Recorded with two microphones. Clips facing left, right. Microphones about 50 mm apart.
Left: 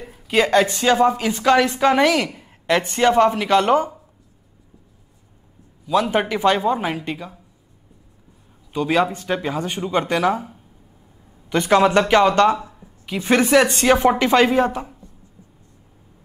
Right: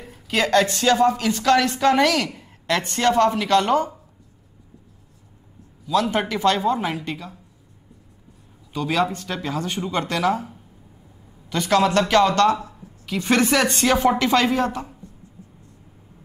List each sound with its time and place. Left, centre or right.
0.0 s speech: centre
5.9 s speech: centre
8.7 s speech: centre
11.5 s a woman's voice: left; by 13.9 s centre
13.9 s speech: centre